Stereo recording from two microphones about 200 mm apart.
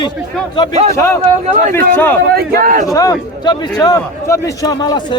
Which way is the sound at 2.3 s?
50° right (ahead or behind).